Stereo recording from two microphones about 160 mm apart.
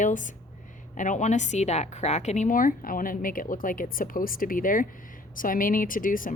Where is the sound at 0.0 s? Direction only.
50° left (ahead or behind).